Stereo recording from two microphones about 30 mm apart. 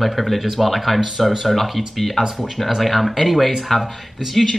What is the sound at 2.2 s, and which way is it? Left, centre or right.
Speech, right.